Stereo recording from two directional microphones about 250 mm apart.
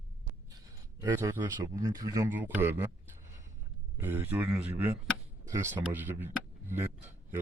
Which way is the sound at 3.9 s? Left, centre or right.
Centre.